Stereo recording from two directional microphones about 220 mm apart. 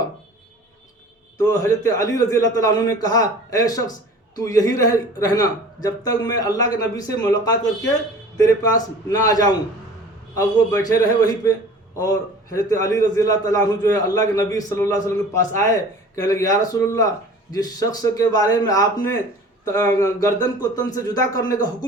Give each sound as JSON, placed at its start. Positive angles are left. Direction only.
{"t": 1.4, "sound": "a man's voice", "side_deg": 15}
{"t": 8.4, "sound": "a man's voice", "side_deg": 15}